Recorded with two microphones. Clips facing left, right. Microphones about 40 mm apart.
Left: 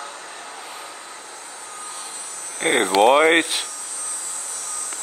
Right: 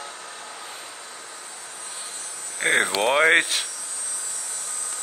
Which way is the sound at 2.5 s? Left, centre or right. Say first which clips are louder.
Left 4 dB; left.